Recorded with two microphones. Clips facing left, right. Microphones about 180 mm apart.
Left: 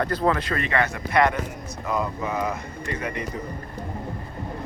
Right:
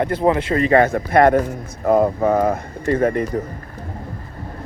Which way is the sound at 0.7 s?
45° right (ahead or behind).